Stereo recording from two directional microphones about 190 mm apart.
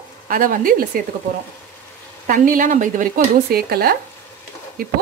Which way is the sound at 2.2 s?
45° right (ahead or behind).